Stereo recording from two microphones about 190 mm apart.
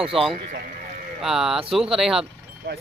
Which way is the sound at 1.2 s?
Centre (ahead or behind).